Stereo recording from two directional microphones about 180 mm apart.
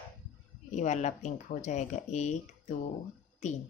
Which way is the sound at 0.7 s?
40° left (ahead or behind).